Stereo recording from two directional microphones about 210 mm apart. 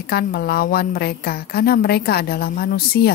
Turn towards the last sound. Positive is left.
turn(degrees=45)  # may be behind; listen again after turning